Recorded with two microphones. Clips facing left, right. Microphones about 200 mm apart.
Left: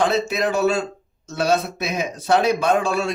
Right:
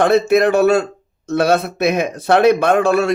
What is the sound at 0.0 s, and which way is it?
Speech, 60° right (ahead or behind).